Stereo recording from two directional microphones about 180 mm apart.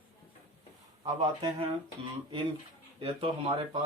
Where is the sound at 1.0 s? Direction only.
25° right (ahead or behind).